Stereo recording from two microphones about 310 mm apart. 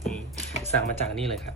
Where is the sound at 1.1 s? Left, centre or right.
Centre.